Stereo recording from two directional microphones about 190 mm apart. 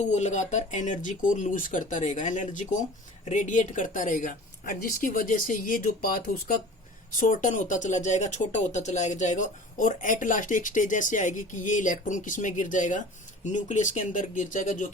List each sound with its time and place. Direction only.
0.0 s speech: 40° left (ahead or behind)